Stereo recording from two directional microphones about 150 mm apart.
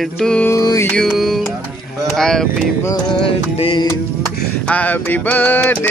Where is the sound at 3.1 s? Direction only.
35° left (ahead or behind).